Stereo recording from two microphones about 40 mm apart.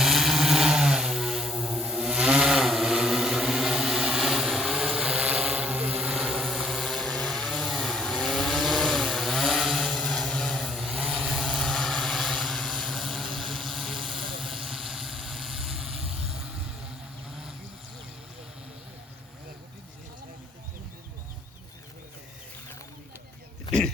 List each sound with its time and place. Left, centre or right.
0.0 s vehicle: centre
1.2 s a sound: centre
2.0 s a sound: right
2.4 s a sound: centre
2.9 s vehicle: centre
5.2 s vehicle: right
6.1 s vehicle: centre
9.4 s chainsaw: centre
10.1 s vehicle: centre
10.8 s vehicle: centre
11.6 s vehicle: centre